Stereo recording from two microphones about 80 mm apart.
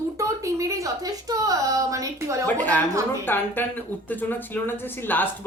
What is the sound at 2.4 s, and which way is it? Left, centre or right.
Speech, centre.